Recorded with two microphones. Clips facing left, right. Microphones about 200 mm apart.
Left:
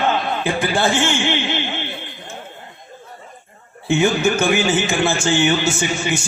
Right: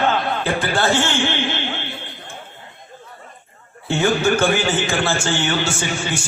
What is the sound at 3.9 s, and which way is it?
A man's voice, 20° left (ahead or behind).